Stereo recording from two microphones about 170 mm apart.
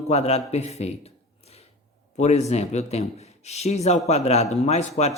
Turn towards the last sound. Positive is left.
turn(degrees=45)  # may be behind; listen again after turning